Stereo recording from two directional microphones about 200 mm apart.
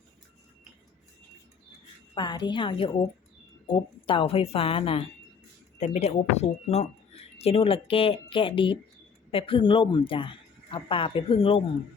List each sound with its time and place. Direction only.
2.1 s speech: 20° left (ahead or behind)